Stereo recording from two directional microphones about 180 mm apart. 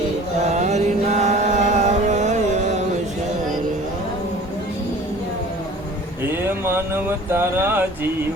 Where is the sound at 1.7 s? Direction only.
40° right (ahead or behind).